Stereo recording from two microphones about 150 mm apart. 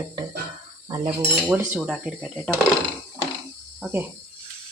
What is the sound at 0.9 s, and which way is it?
Cutlery, 30° right (ahead or behind).